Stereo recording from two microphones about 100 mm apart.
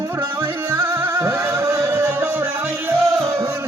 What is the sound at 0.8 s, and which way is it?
Music, 30° right (ahead or behind).